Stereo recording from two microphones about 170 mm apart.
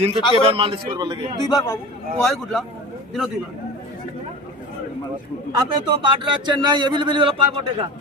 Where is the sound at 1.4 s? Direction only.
25° left (ahead or behind).